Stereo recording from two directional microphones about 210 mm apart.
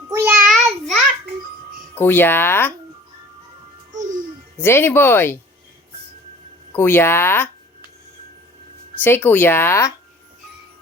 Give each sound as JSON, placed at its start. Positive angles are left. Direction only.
{"t": 0.1, "sound": "child singing", "side_deg": -15}
{"t": 0.4, "sound": "child singing", "side_deg": 0}
{"t": 2.0, "sound": "speech", "side_deg": 10}
{"t": 3.9, "sound": "music", "side_deg": -35}
{"t": 4.5, "sound": "speech", "side_deg": 10}
{"t": 6.7, "sound": "speech", "side_deg": 10}
{"t": 9.0, "sound": "speech", "side_deg": 10}